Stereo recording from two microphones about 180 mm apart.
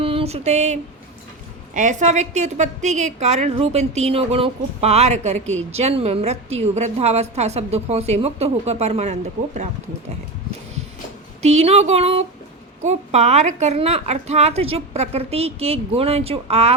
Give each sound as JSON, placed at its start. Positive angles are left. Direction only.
{"t": 0.0, "sound": "a sound", "side_deg": -30}
{"t": 1.7, "sound": "a woman's voice", "side_deg": -45}
{"t": 11.4, "sound": "a woman's voice", "side_deg": -35}